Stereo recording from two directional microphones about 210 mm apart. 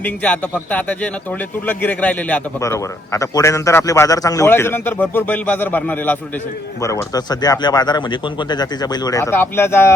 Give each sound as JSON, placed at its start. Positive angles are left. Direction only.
{"t": 0.0, "sound": "a man's voice", "side_deg": 5}